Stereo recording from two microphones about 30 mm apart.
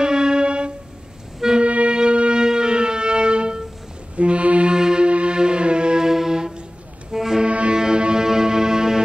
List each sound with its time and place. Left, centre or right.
0.0 s music: right
1.6 s music: right
4.2 s music: right
4.6 s music: right
5.0 s music: right
5.9 s music: centre
7.4 s cello: right
7.7 s music: right